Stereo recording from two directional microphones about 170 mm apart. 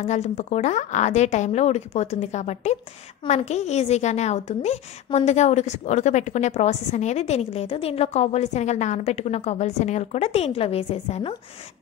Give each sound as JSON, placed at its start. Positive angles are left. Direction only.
{"t": 0.0, "sound": "a woman's voice", "side_deg": 40}